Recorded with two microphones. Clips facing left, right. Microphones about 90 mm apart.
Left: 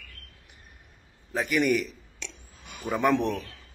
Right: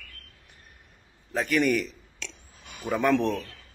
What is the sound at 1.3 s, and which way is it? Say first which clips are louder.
Speech: even; 15° left (ahead or behind).